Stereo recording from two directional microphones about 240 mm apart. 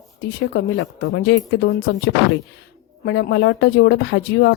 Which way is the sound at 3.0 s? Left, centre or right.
Left.